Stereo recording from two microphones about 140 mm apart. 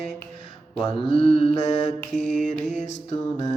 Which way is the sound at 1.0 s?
40° left (ahead or behind).